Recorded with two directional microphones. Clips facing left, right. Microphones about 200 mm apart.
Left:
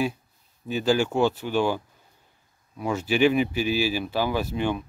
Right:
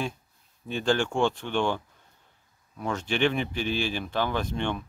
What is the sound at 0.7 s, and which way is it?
Speech, 5° left (ahead or behind).